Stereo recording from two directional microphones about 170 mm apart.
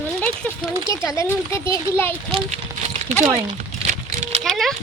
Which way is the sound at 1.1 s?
15° left (ahead or behind).